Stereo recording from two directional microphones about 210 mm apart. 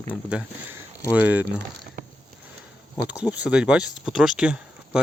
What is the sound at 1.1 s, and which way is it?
Speech, 5° right (ahead or behind).